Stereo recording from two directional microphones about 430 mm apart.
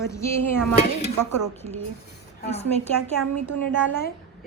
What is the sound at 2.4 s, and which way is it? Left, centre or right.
Speech, centre.